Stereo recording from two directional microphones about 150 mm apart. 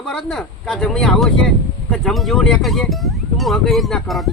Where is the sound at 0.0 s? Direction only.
5° left (ahead or behind).